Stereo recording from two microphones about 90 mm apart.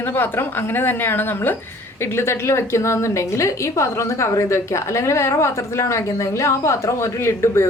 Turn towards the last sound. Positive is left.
turn(degrees=30)  # may be behind; listen again after turning